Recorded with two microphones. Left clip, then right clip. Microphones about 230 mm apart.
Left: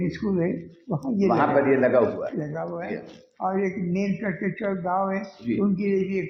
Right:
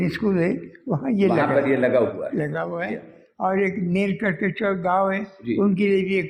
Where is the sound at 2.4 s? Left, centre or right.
Right.